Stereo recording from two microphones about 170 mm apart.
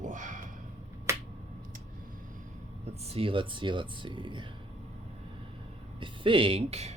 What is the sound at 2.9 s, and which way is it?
Speech, 35° right (ahead or behind).